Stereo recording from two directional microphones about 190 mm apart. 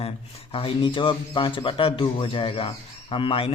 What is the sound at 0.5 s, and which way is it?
A man's voice, 25° left (ahead or behind).